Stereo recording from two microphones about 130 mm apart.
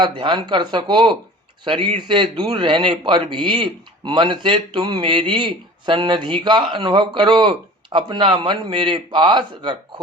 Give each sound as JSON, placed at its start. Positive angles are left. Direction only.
{"t": 0.0, "sound": "a man's voice", "side_deg": -35}